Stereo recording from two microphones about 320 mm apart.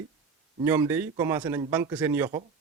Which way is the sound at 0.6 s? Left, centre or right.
Centre.